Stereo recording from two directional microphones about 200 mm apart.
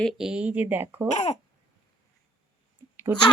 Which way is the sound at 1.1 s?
35° left (ahead or behind).